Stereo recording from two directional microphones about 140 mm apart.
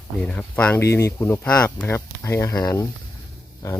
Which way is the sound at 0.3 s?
10° left (ahead or behind).